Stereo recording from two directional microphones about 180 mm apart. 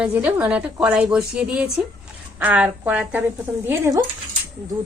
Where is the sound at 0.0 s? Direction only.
10° right (ahead or behind).